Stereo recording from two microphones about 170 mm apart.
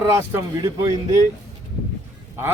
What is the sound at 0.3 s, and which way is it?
Speech, 20° right (ahead or behind).